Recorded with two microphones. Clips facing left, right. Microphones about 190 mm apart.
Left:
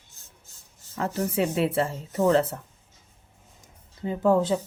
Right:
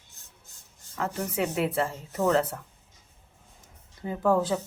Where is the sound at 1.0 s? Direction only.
30° left (ahead or behind).